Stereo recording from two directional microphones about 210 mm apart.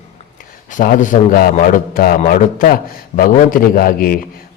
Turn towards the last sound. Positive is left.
turn(degrees=45)  # may be behind; listen again after turning